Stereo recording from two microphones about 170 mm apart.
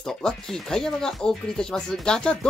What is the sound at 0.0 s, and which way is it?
Speech, 5° left (ahead or behind).